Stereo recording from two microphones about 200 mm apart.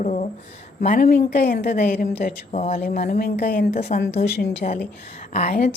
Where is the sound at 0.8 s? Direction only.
45° left (ahead or behind).